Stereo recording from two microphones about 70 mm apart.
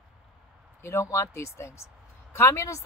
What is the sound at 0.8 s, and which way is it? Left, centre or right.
Speech, left.